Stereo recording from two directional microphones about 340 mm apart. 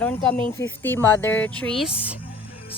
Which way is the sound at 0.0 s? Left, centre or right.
Centre.